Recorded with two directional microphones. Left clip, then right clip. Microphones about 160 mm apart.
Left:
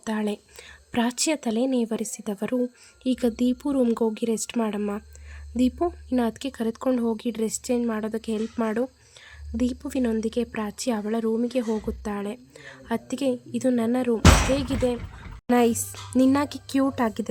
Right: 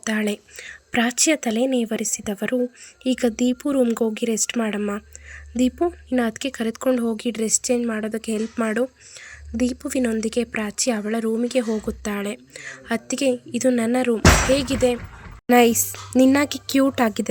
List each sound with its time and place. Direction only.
0.0 s a woman's voice: 5° right (ahead or behind)